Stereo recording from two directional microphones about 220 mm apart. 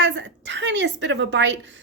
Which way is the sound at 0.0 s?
55° right (ahead or behind).